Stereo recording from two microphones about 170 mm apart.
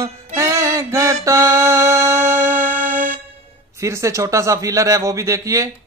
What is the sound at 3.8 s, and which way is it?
A man's voice, 15° right (ahead or behind).